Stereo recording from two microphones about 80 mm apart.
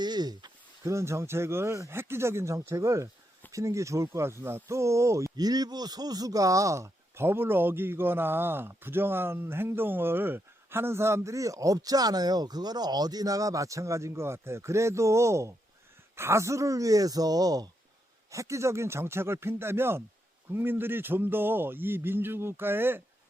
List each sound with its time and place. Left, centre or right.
0.0 s a sound: right
0.9 s a man's voice: right
5.4 s a man's voice: right
18.3 s a man's voice: right